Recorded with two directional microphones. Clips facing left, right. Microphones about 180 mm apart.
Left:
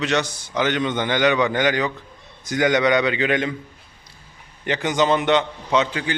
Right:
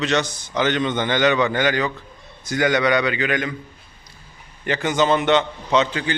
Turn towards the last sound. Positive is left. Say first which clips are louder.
# right 1 dB
turn(degrees=10)  # may be behind; listen again after turning